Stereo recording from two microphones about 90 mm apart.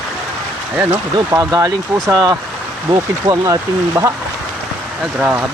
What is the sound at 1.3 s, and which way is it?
Speech, 40° right (ahead or behind).